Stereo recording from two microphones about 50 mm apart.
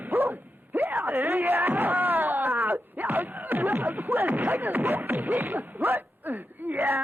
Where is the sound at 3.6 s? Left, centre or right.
Right.